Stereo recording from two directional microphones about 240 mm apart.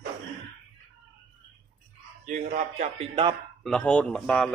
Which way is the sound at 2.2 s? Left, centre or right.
Right.